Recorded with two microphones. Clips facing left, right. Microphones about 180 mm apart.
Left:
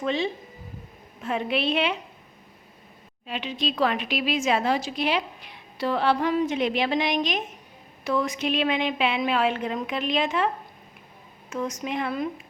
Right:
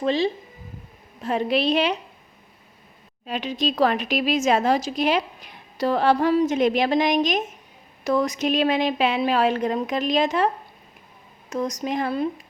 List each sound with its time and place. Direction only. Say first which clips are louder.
0.0 s a woman's voice: right 4 dB; 35° right (ahead or behind)
3.2 s a woman's voice: right 4 dB; 40° right (ahead or behind)